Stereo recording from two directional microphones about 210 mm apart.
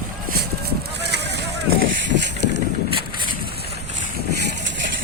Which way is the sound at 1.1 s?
55° right (ahead or behind).